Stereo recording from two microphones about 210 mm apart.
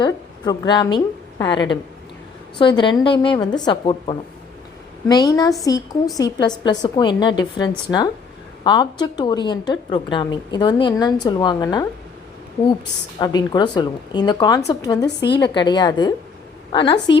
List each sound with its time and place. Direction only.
0.0 s a woman's voice: 20° left (ahead or behind)
2.6 s a woman's voice: 20° left (ahead or behind)
13.1 s a woman's voice: 15° left (ahead or behind)
15.3 s a woman's voice: 55° left (ahead or behind)
15.5 s a woman's voice: 20° left (ahead or behind)